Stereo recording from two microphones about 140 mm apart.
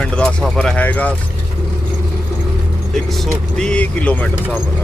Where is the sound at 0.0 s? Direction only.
5° left (ahead or behind).